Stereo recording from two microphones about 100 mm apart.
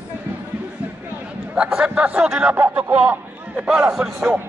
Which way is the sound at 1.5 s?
10° right (ahead or behind).